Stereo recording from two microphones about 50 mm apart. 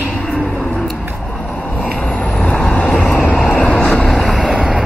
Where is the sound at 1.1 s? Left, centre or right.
Centre.